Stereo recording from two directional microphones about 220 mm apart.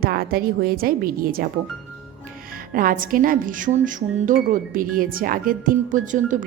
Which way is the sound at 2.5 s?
40° right (ahead or behind).